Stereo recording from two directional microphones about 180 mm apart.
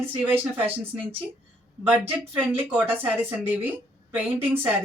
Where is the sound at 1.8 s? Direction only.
10° right (ahead or behind).